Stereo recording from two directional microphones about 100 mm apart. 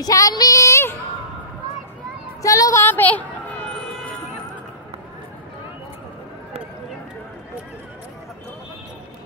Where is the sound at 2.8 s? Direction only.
15° left (ahead or behind).